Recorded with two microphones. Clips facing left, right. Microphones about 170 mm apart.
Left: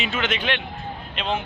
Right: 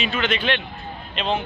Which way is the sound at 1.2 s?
5° left (ahead or behind).